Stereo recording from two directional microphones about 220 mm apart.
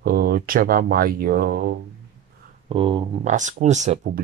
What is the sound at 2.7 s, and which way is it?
Speech, 20° right (ahead or behind).